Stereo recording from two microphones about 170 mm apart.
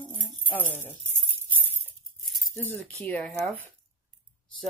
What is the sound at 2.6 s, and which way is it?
Speech, 10° left (ahead or behind).